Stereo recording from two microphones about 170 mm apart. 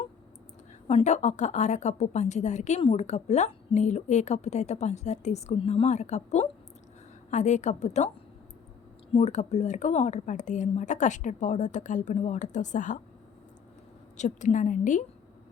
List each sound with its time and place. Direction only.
0.9 s a woman's voice: 40° left (ahead or behind)
9.1 s a woman's voice: 40° left (ahead or behind)
14.2 s a woman's voice: 45° left (ahead or behind)